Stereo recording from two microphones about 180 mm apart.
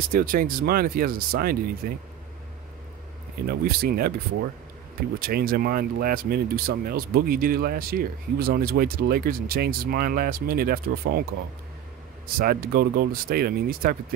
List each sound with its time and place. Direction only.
0.1 s speech: 50° right (ahead or behind)
3.4 s speech: 55° right (ahead or behind)
5.2 s speech: 55° right (ahead or behind)
12.4 s speech: 55° right (ahead or behind)